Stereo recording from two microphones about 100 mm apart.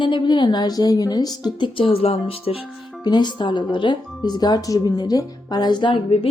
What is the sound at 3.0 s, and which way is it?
Speech, 45° left (ahead or behind).